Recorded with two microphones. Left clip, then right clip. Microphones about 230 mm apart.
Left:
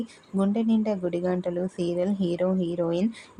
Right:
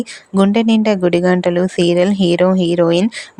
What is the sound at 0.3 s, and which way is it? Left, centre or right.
Speech, right.